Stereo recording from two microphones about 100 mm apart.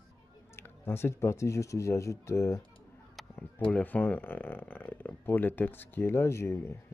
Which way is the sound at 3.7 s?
15° left (ahead or behind).